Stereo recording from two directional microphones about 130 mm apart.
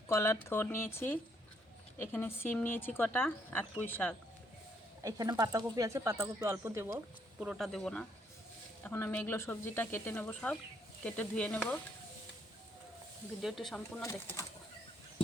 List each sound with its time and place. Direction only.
0.1 s speech: 20° left (ahead or behind)
5.0 s speech: 25° right (ahead or behind)
7.3 s speech: 5° right (ahead or behind)
8.8 s speech: 15° left (ahead or behind)
13.4 s speech: centre (ahead or behind)
14.0 s speech: 25° left (ahead or behind)